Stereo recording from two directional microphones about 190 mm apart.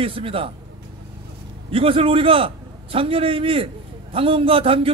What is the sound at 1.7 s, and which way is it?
A man's voice, 30° right (ahead or behind).